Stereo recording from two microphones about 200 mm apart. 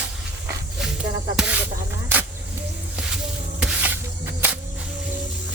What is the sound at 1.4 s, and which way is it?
Snake, 5° right (ahead or behind).